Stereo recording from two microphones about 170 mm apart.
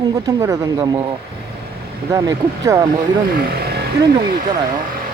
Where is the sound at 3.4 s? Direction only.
65° right (ahead or behind).